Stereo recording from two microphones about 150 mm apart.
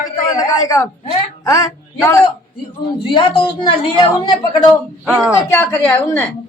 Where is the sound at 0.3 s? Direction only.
20° left (ahead or behind).